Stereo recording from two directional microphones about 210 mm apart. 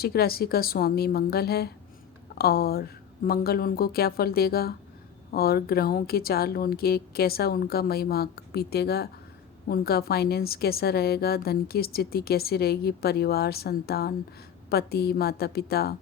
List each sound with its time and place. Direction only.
0.0 s a woman's voice: 45° left (ahead or behind)